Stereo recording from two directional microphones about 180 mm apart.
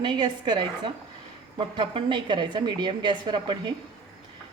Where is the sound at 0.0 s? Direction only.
25° right (ahead or behind).